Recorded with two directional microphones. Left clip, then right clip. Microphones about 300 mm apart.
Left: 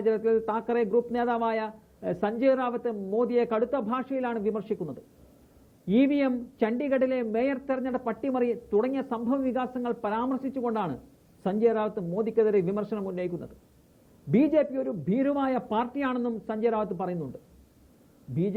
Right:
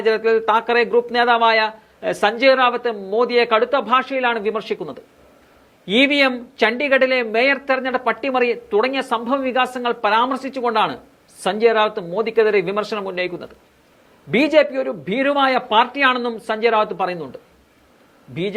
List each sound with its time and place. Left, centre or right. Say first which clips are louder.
0.0 s speech: right 8 dB; centre
5.8 s speech: right 10 dB; centre